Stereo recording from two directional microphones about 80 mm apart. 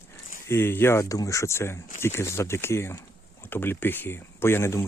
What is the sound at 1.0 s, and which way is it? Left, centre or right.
Speech, left.